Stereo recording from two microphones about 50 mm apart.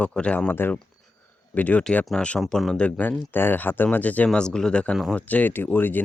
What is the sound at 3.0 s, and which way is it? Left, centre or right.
Speech, left.